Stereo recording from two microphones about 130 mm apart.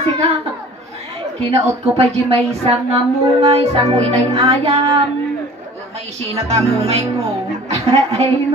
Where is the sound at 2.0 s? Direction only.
45° right (ahead or behind).